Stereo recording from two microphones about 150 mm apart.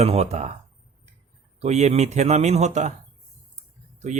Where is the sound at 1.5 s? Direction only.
45° right (ahead or behind).